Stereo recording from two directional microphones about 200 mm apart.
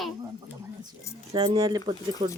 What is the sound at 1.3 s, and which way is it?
Speech, 20° right (ahead or behind).